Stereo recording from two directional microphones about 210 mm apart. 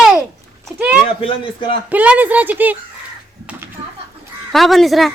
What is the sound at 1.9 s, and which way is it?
Speech, 5° right (ahead or behind).